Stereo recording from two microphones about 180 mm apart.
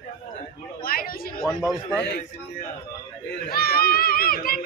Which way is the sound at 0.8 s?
55° left (ahead or behind).